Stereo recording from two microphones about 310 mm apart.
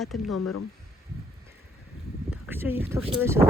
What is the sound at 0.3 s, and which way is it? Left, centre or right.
Speech, left.